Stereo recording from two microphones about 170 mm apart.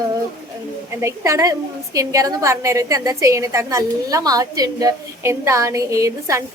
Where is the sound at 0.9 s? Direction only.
15° right (ahead or behind).